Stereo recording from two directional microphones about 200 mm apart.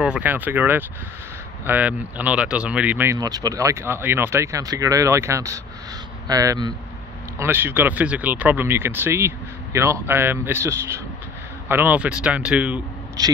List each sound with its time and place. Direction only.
0.0 s speech: 5° right (ahead or behind)